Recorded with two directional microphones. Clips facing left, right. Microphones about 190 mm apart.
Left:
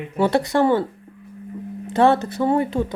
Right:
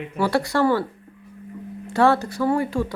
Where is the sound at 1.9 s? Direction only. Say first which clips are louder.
Left 2 dB; 20° left (ahead or behind).